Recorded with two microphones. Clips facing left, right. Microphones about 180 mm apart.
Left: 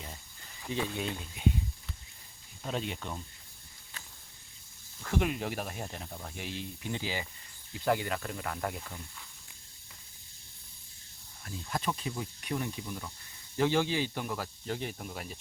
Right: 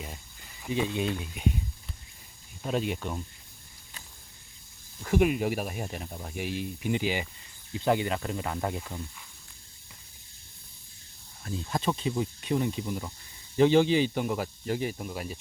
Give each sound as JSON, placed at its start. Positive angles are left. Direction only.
{"t": 0.6, "sound": "speech", "side_deg": -15}
{"t": 2.6, "sound": "speech", "side_deg": -10}
{"t": 5.0, "sound": "speech", "side_deg": -10}
{"t": 11.7, "sound": "speech", "side_deg": -25}
{"t": 14.7, "sound": "speech", "side_deg": -5}